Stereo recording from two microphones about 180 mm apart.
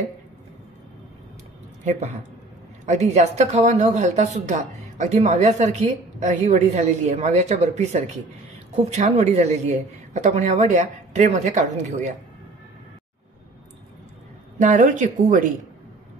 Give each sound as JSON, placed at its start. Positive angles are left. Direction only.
{"t": 1.9, "sound": "speech", "side_deg": -40}
{"t": 14.6, "sound": "speech", "side_deg": -45}